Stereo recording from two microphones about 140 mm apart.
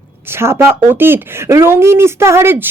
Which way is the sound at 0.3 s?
15° right (ahead or behind).